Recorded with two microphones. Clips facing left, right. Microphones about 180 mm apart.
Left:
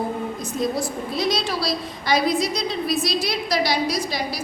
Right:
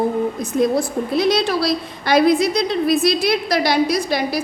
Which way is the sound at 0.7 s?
60° right (ahead or behind).